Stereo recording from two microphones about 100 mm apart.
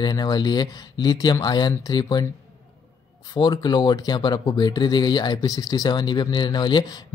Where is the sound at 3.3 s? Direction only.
45° left (ahead or behind).